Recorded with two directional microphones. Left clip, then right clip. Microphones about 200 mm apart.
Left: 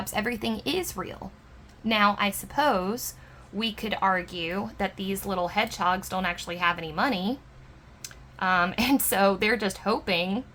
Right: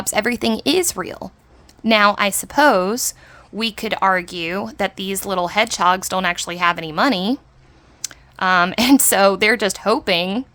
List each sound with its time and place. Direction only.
0.0 s speech: 50° right (ahead or behind)